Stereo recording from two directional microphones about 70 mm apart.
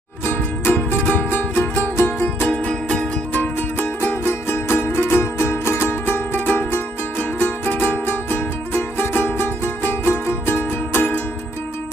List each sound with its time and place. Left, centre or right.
0.3 s music: left
2.6 s music: centre
3.3 s music: left